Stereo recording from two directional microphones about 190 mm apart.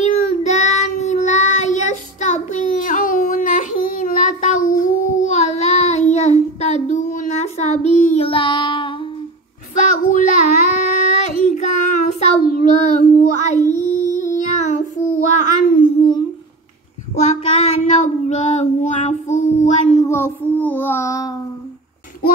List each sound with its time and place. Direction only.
0.0 s child singing: 40° left (ahead or behind)
9.8 s child singing: 45° left (ahead or behind)
16.0 s humming: 20° left (ahead or behind)
17.3 s child singing: 35° left (ahead or behind)
19.9 s child singing: 15° left (ahead or behind)